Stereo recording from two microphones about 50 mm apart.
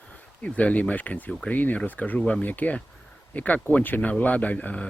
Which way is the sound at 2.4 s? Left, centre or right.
Left.